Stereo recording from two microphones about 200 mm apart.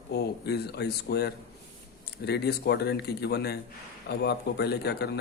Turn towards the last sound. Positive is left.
turn(degrees=55)  # may be behind; listen again after turning